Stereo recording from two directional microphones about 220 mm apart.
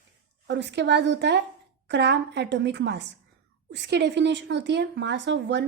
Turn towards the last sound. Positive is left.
turn(degrees=-50)  # may be behind; listen again after turning